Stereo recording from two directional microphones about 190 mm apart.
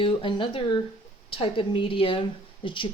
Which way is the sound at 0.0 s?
25° left (ahead or behind).